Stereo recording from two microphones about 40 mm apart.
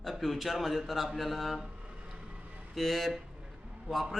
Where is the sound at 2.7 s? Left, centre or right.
Centre.